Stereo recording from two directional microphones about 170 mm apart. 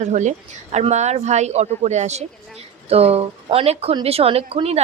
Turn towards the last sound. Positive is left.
turn(degrees=-35)  # may be behind; listen again after turning